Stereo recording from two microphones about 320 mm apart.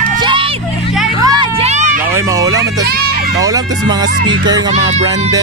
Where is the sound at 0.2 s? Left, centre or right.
Centre.